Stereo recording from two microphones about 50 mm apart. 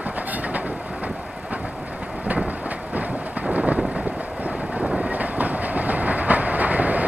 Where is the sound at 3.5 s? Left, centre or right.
Right.